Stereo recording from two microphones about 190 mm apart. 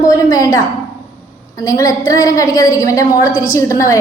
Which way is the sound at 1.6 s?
20° left (ahead or behind).